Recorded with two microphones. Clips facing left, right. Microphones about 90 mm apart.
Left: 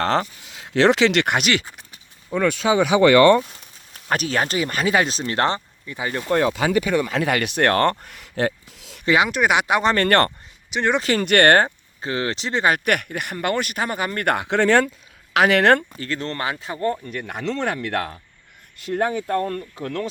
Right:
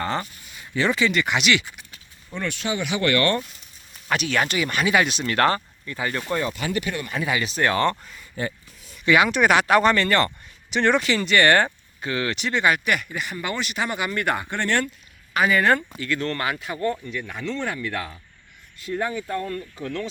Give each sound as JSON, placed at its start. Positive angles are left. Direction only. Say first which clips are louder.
{"t": 0.0, "sound": "speech", "louder": "left 6 dB", "side_deg": 85}
{"t": 1.3, "sound": "speech", "louder": "left 1 dB", "side_deg": 45}
{"t": 4.1, "sound": "speech", "louder": "left 1 dB", "side_deg": 40}
{"t": 6.3, "sound": "speech", "louder": "left 9 dB", "side_deg": 90}
{"t": 9.0, "sound": "speech", "louder": "even", "side_deg": 25}
{"t": 9.5, "sound": "speech", "louder": "right 2 dB", "side_deg": 15}
{"t": 9.9, "sound": "speech", "louder": "left 3 dB", "side_deg": 55}
{"t": 10.7, "sound": "speech", "louder": "right 1 dB", "side_deg": 5}
{"t": 11.0, "sound": "speech", "louder": "left 3 dB", "side_deg": 45}
{"t": 11.6, "sound": "speech", "louder": "left 2 dB", "side_deg": 30}
{"t": 16.0, "sound": "speech", "louder": "right 1 dB", "side_deg": 35}
{"t": 17.1, "sound": "speech", "louder": "left 3 dB", "side_deg": 55}